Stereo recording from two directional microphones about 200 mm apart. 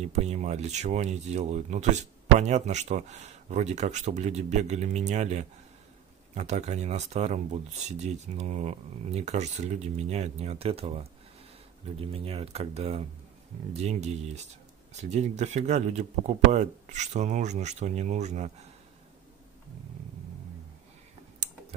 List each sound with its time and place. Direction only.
0.0 s speech: 35° right (ahead or behind)